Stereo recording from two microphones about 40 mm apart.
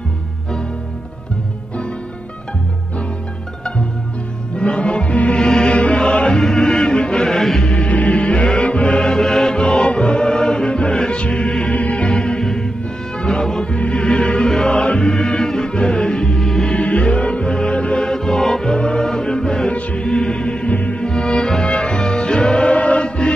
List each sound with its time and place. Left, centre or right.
4.6 s music: left
5.4 s music: left
7.2 s music: centre
7.6 s music: left; by 9.6 s centre
9.6 s music: left
11.7 s music: left
12.0 s music: left
16.7 s music: left
18.0 s music: centre
19.7 s music: left
20.1 s music: left
20.7 s music: left
21.0 s music: centre